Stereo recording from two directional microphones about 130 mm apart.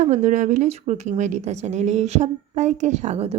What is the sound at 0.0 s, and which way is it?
A woman's voice, 70° right (ahead or behind).